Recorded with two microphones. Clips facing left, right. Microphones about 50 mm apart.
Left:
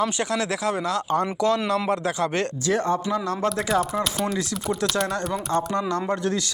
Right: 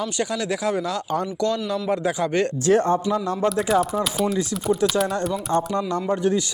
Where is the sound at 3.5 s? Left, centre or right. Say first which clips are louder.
Right 3 dB; centre.